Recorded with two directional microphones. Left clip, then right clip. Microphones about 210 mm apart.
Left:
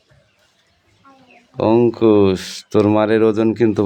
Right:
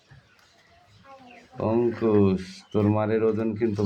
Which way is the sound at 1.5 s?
60° left (ahead or behind).